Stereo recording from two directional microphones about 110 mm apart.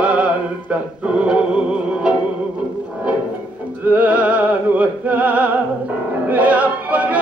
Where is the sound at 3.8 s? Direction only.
15° right (ahead or behind).